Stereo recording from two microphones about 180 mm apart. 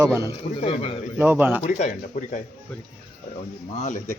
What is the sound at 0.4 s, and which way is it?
Speech, 35° left (ahead or behind).